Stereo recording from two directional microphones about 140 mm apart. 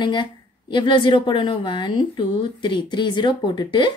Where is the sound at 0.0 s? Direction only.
35° left (ahead or behind).